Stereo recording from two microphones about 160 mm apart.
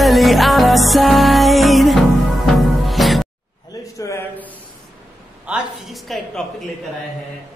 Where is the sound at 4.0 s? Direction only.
20° left (ahead or behind).